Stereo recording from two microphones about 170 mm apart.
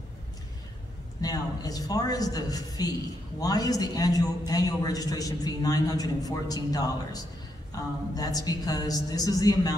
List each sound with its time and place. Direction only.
1.2 s a man's voice: 20° left (ahead or behind)